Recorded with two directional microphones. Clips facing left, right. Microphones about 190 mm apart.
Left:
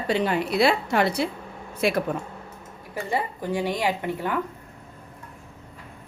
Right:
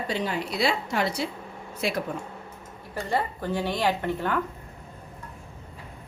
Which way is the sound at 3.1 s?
10° left (ahead or behind).